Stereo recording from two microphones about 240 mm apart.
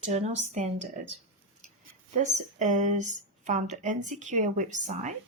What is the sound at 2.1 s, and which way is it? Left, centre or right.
A woman's voice, right.